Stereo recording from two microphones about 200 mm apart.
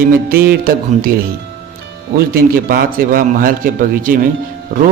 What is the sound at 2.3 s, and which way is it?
Speech, 50° right (ahead or behind).